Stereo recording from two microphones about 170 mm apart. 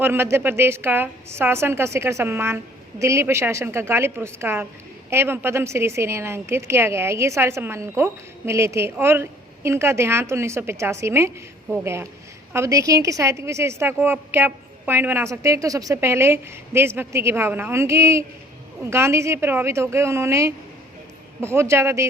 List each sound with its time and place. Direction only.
0.0 s a woman's voice: 15° right (ahead or behind)